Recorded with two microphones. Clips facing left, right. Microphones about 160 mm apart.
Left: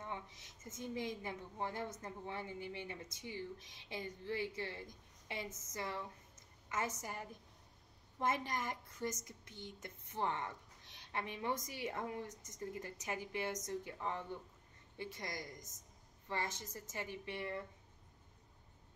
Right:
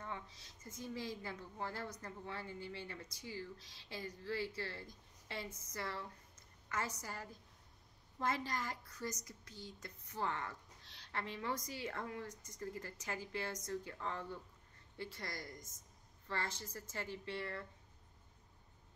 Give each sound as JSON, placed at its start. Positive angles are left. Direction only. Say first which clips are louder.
{"t": 0.0, "sound": "a woman's voice", "louder": "left 1 dB", "side_deg": 20}